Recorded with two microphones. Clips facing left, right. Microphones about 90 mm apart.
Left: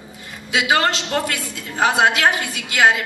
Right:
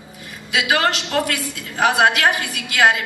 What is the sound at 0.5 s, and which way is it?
A woman's voice, 30° left (ahead or behind).